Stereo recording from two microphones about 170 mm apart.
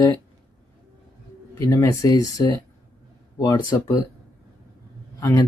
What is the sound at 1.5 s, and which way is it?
Speech, 20° left (ahead or behind).